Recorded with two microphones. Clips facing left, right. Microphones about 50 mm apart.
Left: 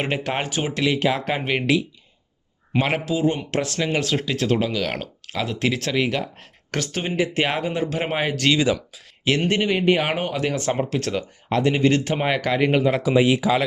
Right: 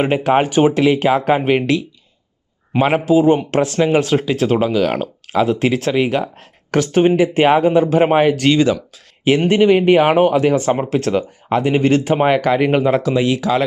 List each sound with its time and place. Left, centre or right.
0.0 s speech: centre
2.7 s speech: centre
3.1 s speech: right
6.7 s speech: right
8.4 s speech: centre
9.2 s speech: centre
13.0 s speech: centre